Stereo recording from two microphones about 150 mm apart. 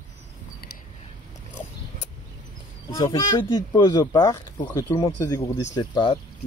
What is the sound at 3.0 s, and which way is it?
Speech, 30° left (ahead or behind).